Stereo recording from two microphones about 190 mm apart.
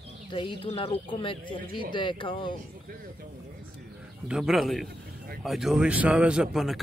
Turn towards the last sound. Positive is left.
turn(degrees=0)  # may be behind; listen again after turning